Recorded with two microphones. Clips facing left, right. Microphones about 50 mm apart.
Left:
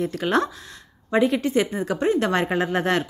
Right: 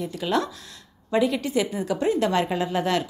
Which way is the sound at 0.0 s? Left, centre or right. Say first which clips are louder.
Left 3 dB; left.